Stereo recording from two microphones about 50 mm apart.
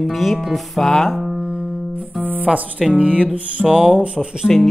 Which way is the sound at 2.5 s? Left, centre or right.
Centre.